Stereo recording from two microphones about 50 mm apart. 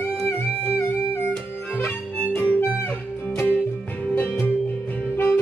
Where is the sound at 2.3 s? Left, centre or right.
Left.